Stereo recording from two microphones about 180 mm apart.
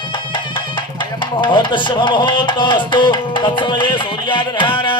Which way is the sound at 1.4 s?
25° left (ahead or behind).